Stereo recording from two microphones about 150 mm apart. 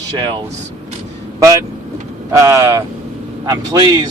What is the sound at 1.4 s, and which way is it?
A man's voice, 20° right (ahead or behind).